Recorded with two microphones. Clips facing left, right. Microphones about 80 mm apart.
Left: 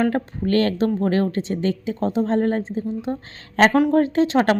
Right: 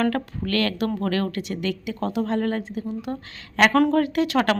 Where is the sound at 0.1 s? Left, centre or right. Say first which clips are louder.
Left 4 dB; left.